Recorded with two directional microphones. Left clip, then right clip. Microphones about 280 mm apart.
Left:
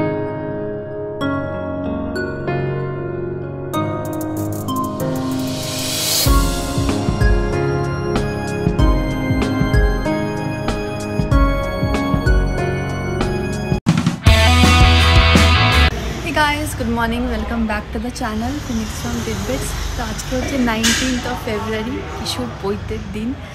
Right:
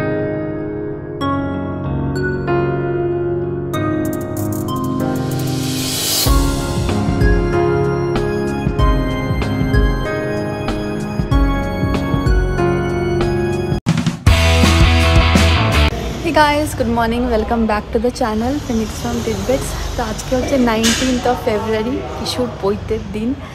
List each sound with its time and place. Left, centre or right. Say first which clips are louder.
7.8 s music: right 4 dB; centre
11.9 s music: left 1 dB; centre
16.3 s a sound: right 4 dB; centre
20.2 s speech: right 4 dB; centre